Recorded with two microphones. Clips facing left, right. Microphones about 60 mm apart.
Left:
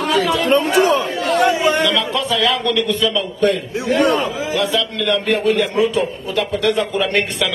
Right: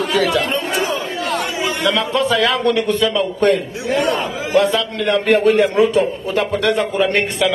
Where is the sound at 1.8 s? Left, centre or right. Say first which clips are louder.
Right 1 dB; right.